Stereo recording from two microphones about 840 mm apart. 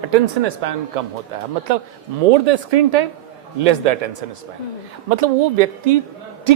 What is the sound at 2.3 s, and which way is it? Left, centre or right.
Speech, right.